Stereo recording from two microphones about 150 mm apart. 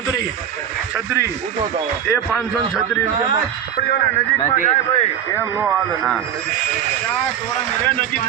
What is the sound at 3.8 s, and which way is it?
Speech, 90° left.